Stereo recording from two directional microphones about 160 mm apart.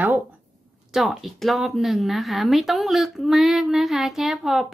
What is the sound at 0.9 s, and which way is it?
Speech, centre (ahead or behind).